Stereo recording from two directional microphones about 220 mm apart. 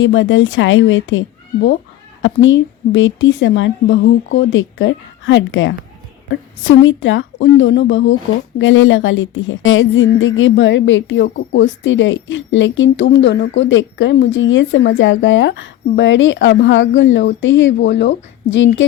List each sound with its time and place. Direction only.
0.0 s a woman's voice: 60° left (ahead or behind)
2.2 s a woman's voice: 60° left (ahead or behind)